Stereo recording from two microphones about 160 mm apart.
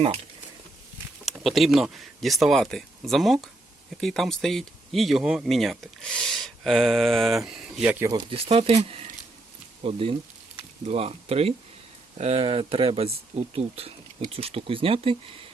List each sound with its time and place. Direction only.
1.2 s speech: centre (ahead or behind)
8.0 s speech: 30° right (ahead or behind)